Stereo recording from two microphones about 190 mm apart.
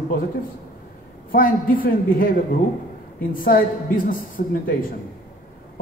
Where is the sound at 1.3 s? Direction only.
45° left (ahead or behind).